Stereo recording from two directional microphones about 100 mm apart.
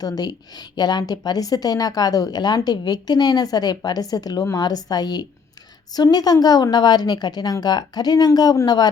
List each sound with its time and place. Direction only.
0.0 s a woman's voice: 45° left (ahead or behind)